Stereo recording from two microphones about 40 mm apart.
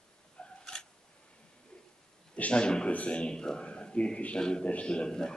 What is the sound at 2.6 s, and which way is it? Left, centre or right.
Speech, left.